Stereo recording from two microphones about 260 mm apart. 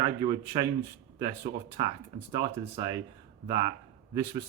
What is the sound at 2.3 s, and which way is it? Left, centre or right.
Speech, centre.